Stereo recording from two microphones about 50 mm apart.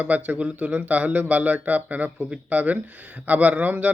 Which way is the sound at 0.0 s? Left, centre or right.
Right.